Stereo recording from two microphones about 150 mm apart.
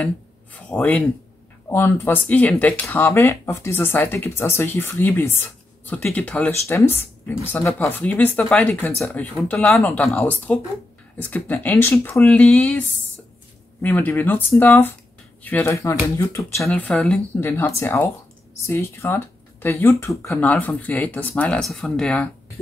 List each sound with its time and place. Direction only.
0.0 s speech: 10° left (ahead or behind)
16.5 s speech: 5° left (ahead or behind)